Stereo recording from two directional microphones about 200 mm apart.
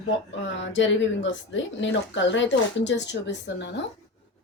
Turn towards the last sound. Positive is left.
turn(degrees=60)  # may be behind; listen again after turning